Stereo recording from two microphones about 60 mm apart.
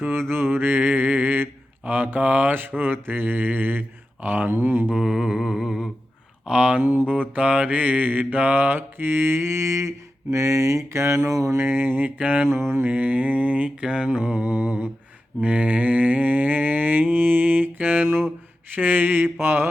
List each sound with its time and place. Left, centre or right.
0.1 s mantra: right
5.0 s humming: centre
6.4 s speech: centre
6.8 s mantra: right
11.2 s a sound: right
11.5 s mantra: right
12.0 s mantra: right
12.5 s mantra: right
12.8 s mantra: right